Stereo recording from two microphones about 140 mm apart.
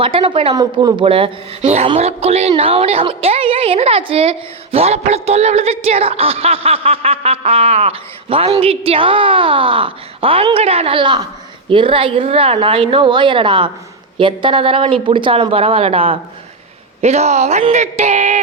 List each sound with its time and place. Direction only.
0.0 s a woman's voice: 40° right (ahead or behind)
0.5 s speech: 25° right (ahead or behind)
1.0 s a woman's voice: 40° right (ahead or behind); by 18.3 s 55° right (ahead or behind)